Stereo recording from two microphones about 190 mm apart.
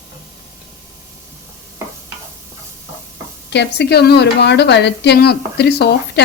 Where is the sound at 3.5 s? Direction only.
60° left (ahead or behind).